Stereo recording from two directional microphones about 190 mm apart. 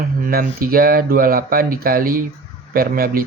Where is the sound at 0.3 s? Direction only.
50° right (ahead or behind).